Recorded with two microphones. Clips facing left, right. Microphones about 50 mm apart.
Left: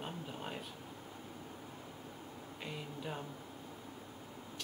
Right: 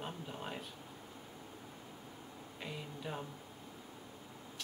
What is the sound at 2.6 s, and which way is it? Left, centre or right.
Speech, centre.